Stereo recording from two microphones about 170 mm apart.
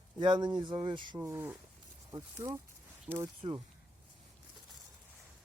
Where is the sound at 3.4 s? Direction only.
35° right (ahead or behind).